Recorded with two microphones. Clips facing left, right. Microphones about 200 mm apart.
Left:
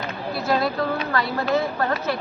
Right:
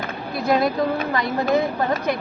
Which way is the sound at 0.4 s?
20° right (ahead or behind).